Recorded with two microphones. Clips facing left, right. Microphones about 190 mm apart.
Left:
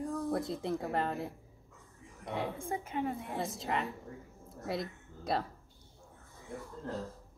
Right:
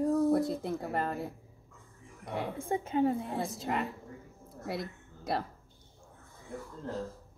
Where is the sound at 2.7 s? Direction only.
30° right (ahead or behind).